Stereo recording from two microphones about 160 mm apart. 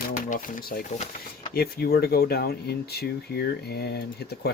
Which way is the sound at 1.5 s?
75° left (ahead or behind).